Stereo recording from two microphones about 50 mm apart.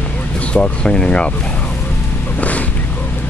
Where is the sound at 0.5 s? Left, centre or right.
Centre.